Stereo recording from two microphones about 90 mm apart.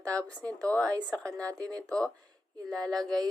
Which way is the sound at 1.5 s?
40° right (ahead or behind).